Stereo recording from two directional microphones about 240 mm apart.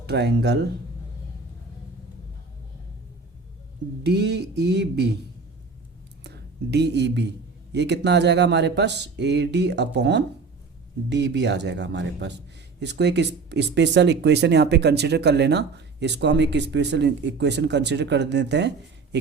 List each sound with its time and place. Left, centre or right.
0.0 s speech: right
4.0 s speech: right
6.2 s speech: right